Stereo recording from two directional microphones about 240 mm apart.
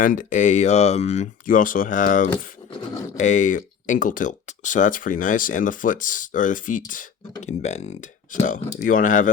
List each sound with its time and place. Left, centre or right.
0.0 s speech: left